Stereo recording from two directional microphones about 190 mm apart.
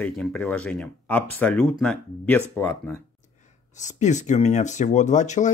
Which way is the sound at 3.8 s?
40° left (ahead or behind).